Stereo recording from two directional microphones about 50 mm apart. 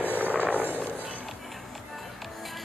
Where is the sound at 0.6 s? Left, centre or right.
Left.